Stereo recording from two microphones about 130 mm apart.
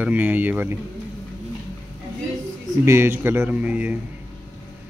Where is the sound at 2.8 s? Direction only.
20° right (ahead or behind).